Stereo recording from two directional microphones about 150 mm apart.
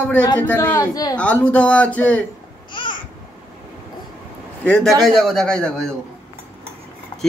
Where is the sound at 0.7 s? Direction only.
25° left (ahead or behind).